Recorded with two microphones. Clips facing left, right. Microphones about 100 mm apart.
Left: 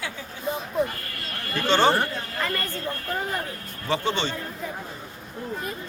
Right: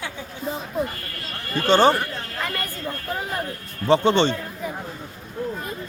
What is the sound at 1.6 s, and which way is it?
Speech, 15° right (ahead or behind).